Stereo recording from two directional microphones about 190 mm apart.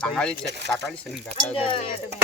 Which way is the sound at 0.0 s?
5° left (ahead or behind).